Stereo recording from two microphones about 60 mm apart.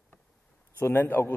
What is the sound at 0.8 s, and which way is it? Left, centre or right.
Speech, left.